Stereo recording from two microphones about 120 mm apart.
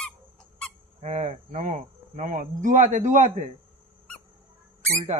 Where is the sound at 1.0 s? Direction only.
75° right (ahead or behind).